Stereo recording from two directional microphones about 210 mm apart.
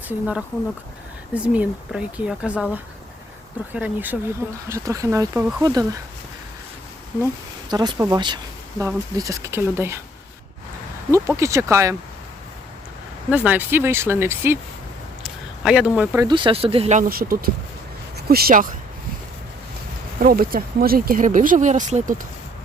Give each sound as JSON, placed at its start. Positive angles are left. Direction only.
{"t": 0.1, "sound": "speech", "side_deg": -5}
{"t": 7.7, "sound": "speech", "side_deg": -20}
{"t": 11.1, "sound": "speech", "side_deg": -15}
{"t": 13.3, "sound": "speech", "side_deg": -5}
{"t": 15.6, "sound": "speech", "side_deg": -5}
{"t": 16.2, "sound": "speech", "side_deg": -25}
{"t": 20.1, "sound": "speech", "side_deg": -45}